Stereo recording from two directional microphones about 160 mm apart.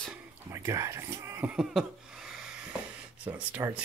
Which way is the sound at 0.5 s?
20° right (ahead or behind).